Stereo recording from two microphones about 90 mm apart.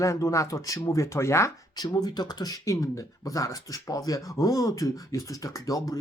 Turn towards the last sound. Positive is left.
turn(degrees=40)  # may be behind; listen again after turning